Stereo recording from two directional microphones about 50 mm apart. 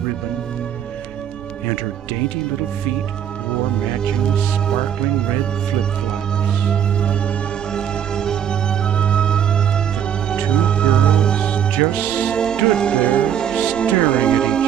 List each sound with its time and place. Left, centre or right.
3.8 s speech: centre
6.7 s music: left